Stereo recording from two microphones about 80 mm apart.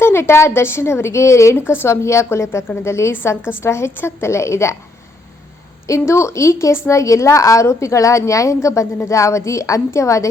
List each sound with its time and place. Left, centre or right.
0.0 s a woman's voice: left
5.9 s a woman's voice: left